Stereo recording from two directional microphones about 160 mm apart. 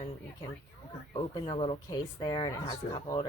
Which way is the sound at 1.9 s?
25° left (ahead or behind).